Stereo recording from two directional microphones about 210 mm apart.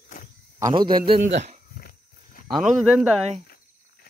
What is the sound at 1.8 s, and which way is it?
Wild animals, 45° left (ahead or behind).